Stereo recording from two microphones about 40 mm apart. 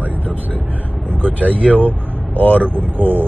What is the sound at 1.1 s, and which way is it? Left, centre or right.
Vehicle, right.